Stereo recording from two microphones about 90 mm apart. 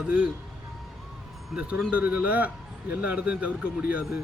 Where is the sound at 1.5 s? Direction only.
15° right (ahead or behind).